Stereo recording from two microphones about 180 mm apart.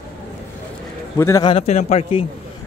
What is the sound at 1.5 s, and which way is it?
Speech, 40° left (ahead or behind).